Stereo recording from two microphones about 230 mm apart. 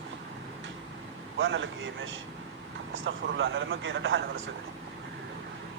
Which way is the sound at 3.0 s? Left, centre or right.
Right.